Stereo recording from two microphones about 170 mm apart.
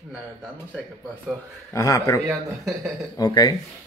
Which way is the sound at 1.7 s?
20° left (ahead or behind).